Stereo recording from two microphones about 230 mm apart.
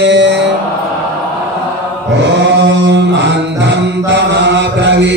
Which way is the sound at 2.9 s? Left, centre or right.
Right.